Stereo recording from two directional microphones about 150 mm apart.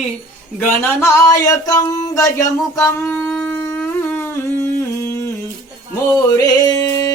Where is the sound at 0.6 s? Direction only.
15° left (ahead or behind).